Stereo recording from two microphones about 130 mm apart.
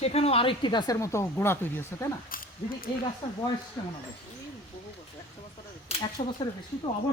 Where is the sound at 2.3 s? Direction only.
90° left.